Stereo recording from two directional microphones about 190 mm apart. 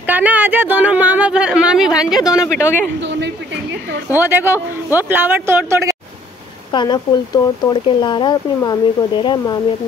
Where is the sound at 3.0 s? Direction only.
70° right (ahead or behind).